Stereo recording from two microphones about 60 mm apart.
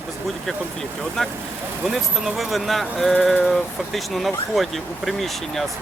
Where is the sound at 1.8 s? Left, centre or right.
Centre.